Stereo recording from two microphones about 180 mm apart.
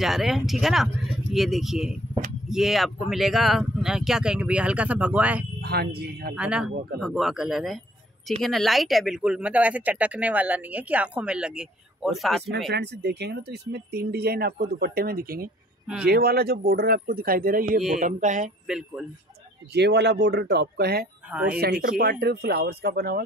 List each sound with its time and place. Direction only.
0.0 s speech: centre (ahead or behind)
5.6 s speech: 60° right (ahead or behind)
6.3 s speech: 5° right (ahead or behind)
12.6 s speech: 65° right (ahead or behind)
17.9 s mantra: 45° right (ahead or behind)
18.7 s speech: 5° right (ahead or behind)
19.7 s speech: 70° right (ahead or behind)
21.3 s speech: 5° right (ahead or behind)
21.8 s speech: 60° right (ahead or behind)